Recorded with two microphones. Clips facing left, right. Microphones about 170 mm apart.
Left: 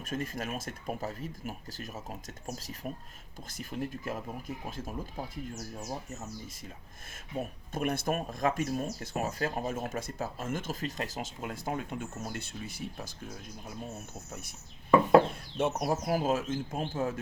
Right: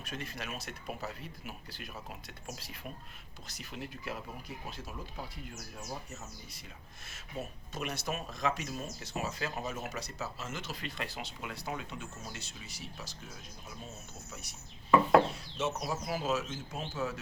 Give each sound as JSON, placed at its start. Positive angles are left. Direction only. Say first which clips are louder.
{"t": 0.0, "sound": "speech", "louder": "left 6 dB", "side_deg": 45}
{"t": 7.3, "sound": "speech", "louder": "left 5 dB", "side_deg": 55}
{"t": 15.2, "sound": "speech", "louder": "left 3 dB", "side_deg": 55}